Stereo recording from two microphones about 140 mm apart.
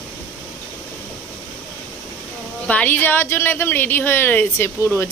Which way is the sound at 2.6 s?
10° left (ahead or behind).